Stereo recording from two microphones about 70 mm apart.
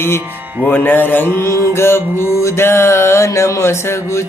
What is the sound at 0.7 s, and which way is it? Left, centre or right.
Mantra, left.